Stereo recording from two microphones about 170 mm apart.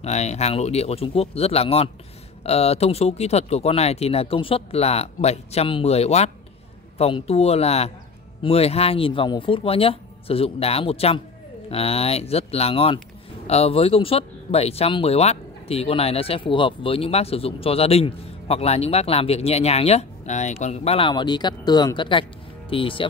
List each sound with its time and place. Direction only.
0.0 s speech: 40° left (ahead or behind)